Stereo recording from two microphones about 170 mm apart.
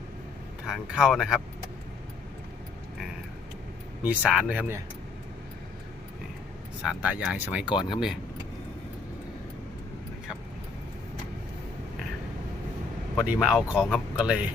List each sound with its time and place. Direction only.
0.6 s speech: 5° right (ahead or behind)
4.0 s speech: 10° right (ahead or behind)
6.8 s speech: 5° right (ahead or behind)
7.7 s speech: 30° left (ahead or behind)
13.2 s speech: 5° right (ahead or behind)